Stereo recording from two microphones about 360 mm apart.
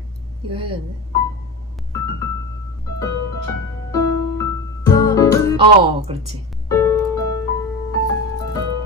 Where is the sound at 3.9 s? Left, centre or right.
Centre.